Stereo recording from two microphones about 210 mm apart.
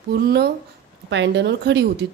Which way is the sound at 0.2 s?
50° right (ahead or behind).